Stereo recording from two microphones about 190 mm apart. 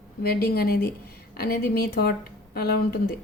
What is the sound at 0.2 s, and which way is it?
Speech, 55° left (ahead or behind).